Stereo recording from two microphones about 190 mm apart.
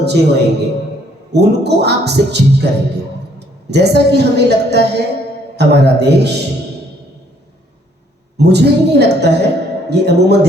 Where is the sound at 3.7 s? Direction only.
60° right (ahead or behind).